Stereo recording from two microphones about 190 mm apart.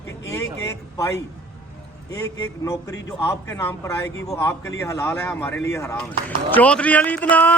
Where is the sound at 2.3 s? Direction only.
15° left (ahead or behind).